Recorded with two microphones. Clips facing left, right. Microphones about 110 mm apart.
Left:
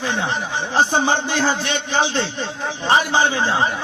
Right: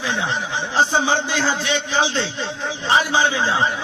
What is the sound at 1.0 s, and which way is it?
Speech, 55° left (ahead or behind).